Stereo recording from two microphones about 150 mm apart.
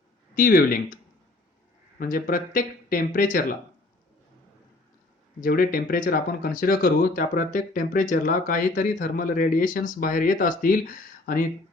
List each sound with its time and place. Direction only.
0.3 s speech: 70° left (ahead or behind)
2.0 s speech: 70° left (ahead or behind)
5.4 s speech: 75° left (ahead or behind)